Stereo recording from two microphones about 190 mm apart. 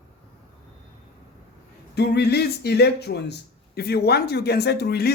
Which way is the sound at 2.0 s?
60° left (ahead or behind).